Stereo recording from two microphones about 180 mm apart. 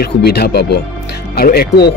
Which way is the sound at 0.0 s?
60° left (ahead or behind).